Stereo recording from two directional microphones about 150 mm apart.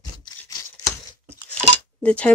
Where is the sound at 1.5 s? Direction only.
5° left (ahead or behind).